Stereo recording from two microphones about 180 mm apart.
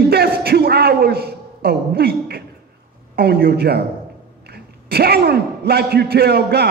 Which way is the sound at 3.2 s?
60° right (ahead or behind).